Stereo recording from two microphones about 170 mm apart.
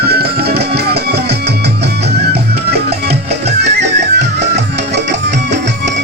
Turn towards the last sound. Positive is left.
turn(degrees=-90)